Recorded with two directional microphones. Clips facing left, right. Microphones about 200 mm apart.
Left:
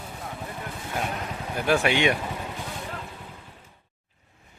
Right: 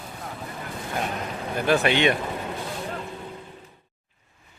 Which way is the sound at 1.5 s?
10° left (ahead or behind).